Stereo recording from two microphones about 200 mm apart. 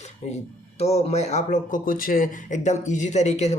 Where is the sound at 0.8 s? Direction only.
30° left (ahead or behind).